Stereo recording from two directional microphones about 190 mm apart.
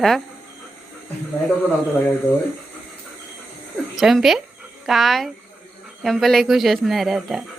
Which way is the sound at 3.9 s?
Centre (ahead or behind).